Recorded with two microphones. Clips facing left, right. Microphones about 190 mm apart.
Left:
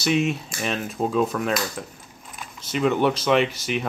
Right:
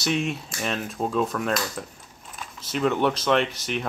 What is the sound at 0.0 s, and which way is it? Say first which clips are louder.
Keys jangling: left 4 dB; centre (ahead or behind).